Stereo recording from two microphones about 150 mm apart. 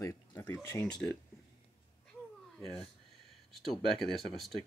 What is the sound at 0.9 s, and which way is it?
Speech, 5° left (ahead or behind).